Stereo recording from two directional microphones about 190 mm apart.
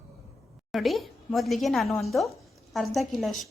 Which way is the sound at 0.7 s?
Centre (ahead or behind).